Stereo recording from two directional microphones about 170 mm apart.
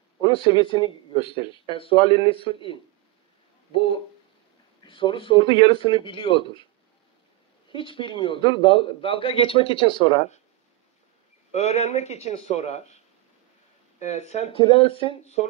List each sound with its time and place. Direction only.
0.2 s a man's voice: 30° left (ahead or behind)
7.7 s a man's voice: 30° left (ahead or behind)
11.5 s a man's voice: 40° left (ahead or behind)